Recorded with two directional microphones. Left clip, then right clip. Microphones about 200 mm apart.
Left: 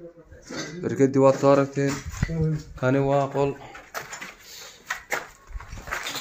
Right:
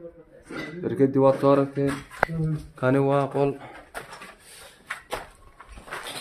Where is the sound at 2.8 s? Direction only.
10° right (ahead or behind).